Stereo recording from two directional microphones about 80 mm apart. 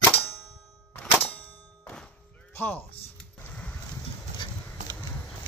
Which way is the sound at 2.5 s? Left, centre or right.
Left.